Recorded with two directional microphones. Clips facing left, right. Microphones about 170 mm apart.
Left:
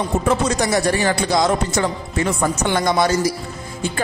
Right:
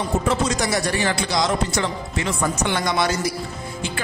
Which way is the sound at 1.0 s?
45° left (ahead or behind).